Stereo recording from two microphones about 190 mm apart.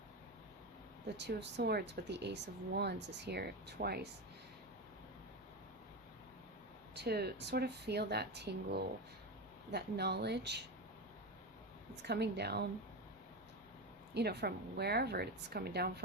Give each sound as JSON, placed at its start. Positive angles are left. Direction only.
{"t": 1.1, "sound": "speech", "side_deg": -65}
{"t": 6.9, "sound": "speech", "side_deg": -60}
{"t": 12.0, "sound": "speech", "side_deg": -60}
{"t": 14.1, "sound": "speech", "side_deg": -60}